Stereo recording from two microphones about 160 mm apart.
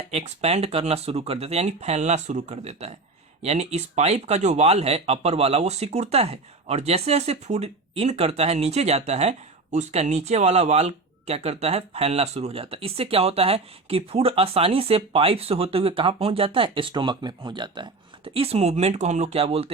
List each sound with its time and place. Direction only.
0.1 s speech: 40° right (ahead or behind)